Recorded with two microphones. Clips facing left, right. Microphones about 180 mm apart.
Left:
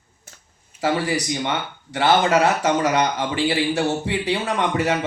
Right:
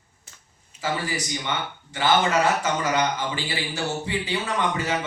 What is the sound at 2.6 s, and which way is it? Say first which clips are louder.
Speech: left 5 dB; 70° left (ahead or behind).